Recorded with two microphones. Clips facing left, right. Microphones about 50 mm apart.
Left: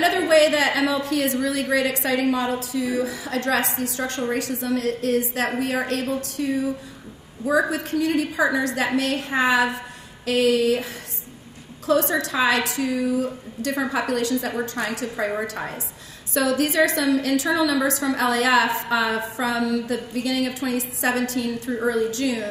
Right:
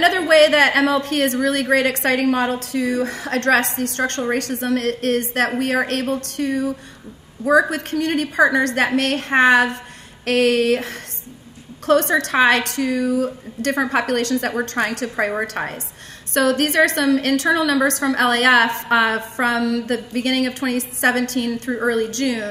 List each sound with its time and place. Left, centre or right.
0.3 s a woman's voice: right
7.7 s a woman's voice: right